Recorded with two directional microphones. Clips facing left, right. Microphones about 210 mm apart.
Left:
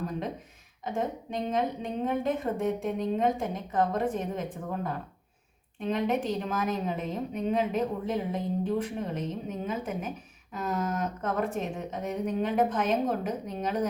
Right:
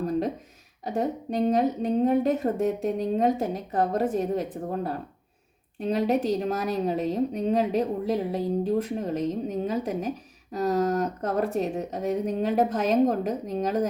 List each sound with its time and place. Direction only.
0.9 s a woman's voice: 40° right (ahead or behind)
5.8 s a woman's voice: 40° right (ahead or behind)